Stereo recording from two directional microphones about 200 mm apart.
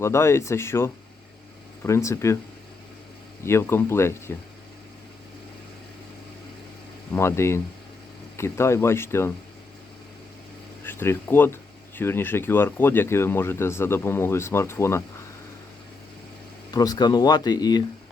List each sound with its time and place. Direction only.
0.0 s speech: 15° left (ahead or behind)
3.4 s speech: 10° left (ahead or behind)
7.1 s speech: 15° left (ahead or behind)
10.8 s speech: 10° left (ahead or behind)
16.7 s speech: 20° left (ahead or behind)